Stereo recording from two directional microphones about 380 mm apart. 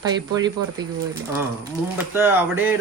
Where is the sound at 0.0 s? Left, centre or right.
Centre.